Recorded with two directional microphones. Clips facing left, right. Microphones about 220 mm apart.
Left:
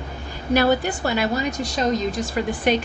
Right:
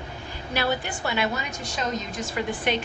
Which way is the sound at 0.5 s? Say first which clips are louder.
Left 8 dB; 40° left (ahead or behind).